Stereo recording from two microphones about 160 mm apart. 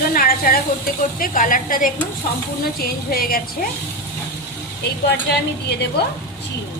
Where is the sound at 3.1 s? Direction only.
65° left (ahead or behind).